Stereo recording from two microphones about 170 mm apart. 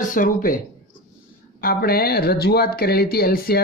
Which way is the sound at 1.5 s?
60° left (ahead or behind).